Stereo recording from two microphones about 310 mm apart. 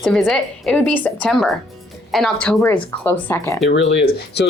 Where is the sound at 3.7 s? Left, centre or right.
Left.